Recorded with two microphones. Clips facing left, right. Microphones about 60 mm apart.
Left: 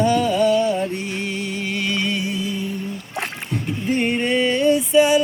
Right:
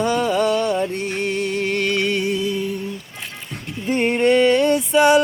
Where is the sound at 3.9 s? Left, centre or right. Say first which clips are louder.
Right 4 dB; right.